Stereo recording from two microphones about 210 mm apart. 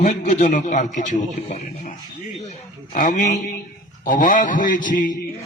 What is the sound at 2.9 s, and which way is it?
A man's voice, 40° left (ahead or behind).